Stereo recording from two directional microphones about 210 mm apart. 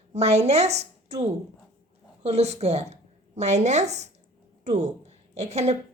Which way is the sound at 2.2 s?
30° right (ahead or behind).